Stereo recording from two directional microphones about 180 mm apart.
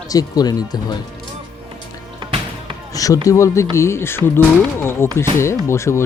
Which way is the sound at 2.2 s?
25° right (ahead or behind).